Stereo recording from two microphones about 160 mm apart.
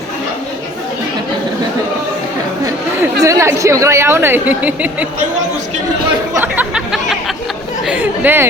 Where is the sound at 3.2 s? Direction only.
20° right (ahead or behind).